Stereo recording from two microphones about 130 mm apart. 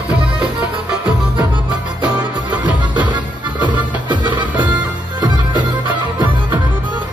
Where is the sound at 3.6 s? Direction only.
35° right (ahead or behind).